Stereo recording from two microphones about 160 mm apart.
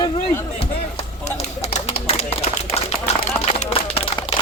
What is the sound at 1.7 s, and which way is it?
Bird, 40° left (ahead or behind).